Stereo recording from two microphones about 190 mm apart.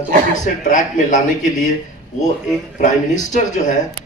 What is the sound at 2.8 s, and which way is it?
Speech, 40° left (ahead or behind).